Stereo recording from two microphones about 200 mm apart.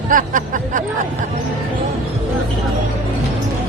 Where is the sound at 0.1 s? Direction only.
40° right (ahead or behind).